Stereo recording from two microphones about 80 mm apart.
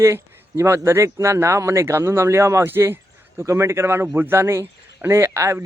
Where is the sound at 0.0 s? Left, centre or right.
Right.